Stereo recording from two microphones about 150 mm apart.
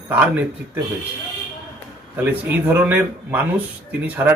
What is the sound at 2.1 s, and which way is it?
Speech, 10° right (ahead or behind).